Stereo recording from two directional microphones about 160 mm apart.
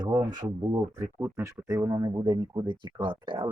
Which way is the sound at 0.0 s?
25° right (ahead or behind).